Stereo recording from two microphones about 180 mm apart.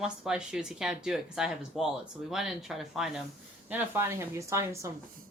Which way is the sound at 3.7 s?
15° right (ahead or behind).